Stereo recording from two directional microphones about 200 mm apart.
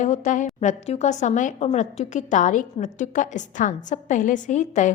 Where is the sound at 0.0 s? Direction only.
40° left (ahead or behind).